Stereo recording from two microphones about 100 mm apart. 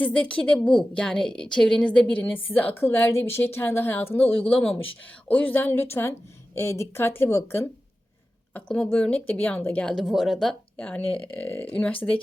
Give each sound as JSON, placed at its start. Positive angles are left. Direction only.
{"t": 0.0, "sound": "a woman's voice", "side_deg": 10}
{"t": 8.5, "sound": "a woman's voice", "side_deg": 15}
{"t": 9.8, "sound": "speech", "side_deg": 0}
{"t": 10.8, "sound": "a woman's voice", "side_deg": 15}